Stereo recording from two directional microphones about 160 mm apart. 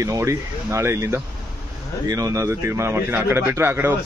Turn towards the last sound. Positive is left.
turn(degrees=-15)  # may be behind; listen again after turning